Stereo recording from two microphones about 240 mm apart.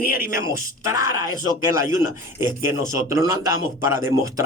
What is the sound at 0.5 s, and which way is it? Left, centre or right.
A man's voice, centre.